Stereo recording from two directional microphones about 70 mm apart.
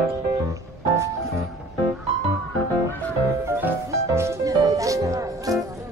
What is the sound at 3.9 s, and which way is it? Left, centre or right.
Music, right.